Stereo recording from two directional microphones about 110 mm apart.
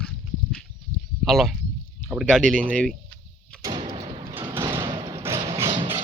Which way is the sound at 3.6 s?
45° right (ahead or behind).